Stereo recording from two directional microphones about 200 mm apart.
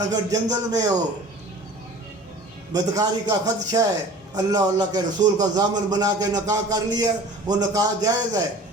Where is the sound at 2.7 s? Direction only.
20° right (ahead or behind).